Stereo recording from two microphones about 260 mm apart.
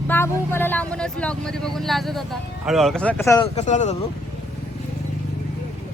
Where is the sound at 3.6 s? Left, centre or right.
Left.